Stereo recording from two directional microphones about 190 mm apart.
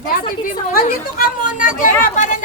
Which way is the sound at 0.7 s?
50° left (ahead or behind).